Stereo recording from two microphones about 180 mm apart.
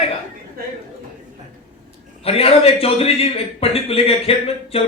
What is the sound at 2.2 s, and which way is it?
A man's voice, 35° left (ahead or behind).